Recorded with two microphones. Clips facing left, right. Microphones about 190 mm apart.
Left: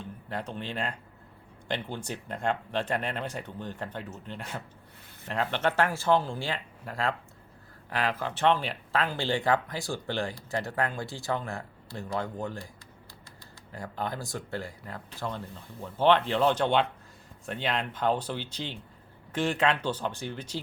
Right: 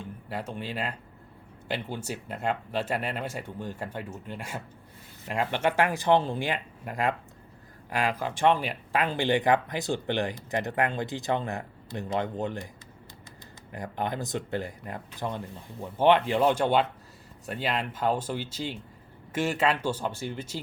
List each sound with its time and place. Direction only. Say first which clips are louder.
0.0 s speech: right 1 dB; 10° right (ahead or behind)
13.7 s speech: right 3 dB; 20° right (ahead or behind)